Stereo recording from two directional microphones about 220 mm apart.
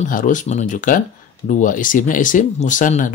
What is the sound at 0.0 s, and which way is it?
Speech, 35° left (ahead or behind).